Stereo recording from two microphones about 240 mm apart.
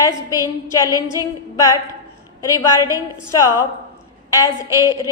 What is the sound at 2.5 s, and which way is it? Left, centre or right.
A woman's voice, centre.